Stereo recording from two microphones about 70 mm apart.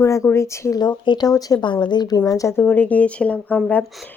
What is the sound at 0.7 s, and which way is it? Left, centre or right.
Speech, left.